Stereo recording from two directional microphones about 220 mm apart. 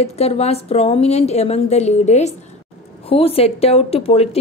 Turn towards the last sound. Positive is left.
turn(degrees=25)  # may be behind; listen again after turning